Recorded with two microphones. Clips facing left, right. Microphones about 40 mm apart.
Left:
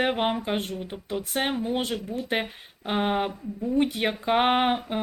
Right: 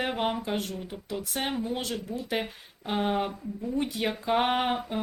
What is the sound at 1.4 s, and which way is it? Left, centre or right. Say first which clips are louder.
Speech: left 4 dB; left.